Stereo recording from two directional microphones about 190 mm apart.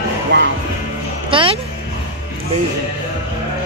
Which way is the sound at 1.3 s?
25° right (ahead or behind).